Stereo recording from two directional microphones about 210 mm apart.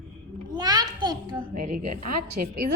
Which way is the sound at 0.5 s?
20° right (ahead or behind).